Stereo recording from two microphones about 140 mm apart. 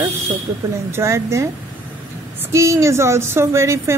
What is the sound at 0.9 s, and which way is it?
Speech, 20° right (ahead or behind).